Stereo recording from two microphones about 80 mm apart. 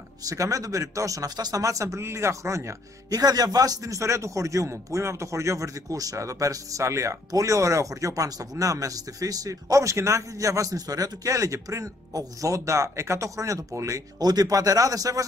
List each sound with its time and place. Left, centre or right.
0.2 s speech: right